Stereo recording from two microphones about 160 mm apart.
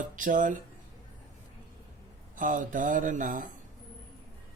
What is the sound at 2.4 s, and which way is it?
Speech, 55° right (ahead or behind).